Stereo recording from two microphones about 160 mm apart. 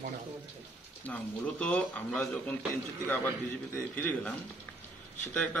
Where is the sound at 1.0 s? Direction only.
10° left (ahead or behind).